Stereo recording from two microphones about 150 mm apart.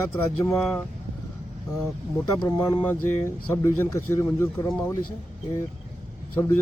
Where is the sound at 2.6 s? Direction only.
15° left (ahead or behind).